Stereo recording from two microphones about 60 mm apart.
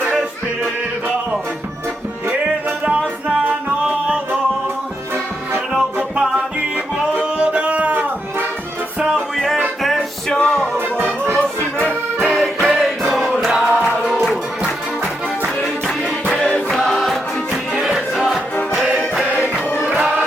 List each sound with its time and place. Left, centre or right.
2.8 s music: centre
6.7 s music: centre
10.2 s music: centre
10.8 s music: right
11.3 s accordion: left
12.2 s music: centre
13.5 s music: centre
14.1 s music: centre
15.6 s music: centre
16.3 s choir: centre
16.6 s choir: centre
17.0 s music: centre
19.9 s music: right